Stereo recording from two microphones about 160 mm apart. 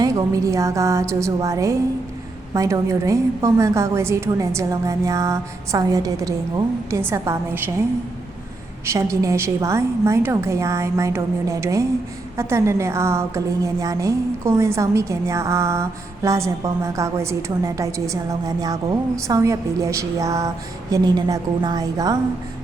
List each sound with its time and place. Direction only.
0.0 s a woman's voice: 20° right (ahead or behind)
8.9 s a woman's voice: 20° right (ahead or behind)